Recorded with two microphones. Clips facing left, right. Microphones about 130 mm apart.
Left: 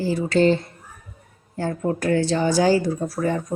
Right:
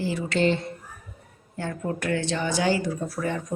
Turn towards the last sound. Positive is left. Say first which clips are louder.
# left 5 dB
turn(degrees=35)  # may be behind; listen again after turning